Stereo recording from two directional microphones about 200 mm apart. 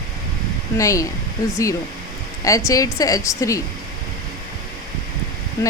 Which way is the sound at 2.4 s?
15° left (ahead or behind).